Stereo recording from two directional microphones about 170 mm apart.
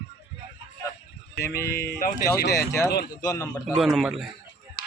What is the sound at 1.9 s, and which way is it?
Speech, 55° left (ahead or behind).